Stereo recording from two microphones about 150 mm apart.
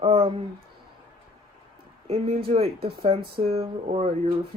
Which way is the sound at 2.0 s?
40° right (ahead or behind).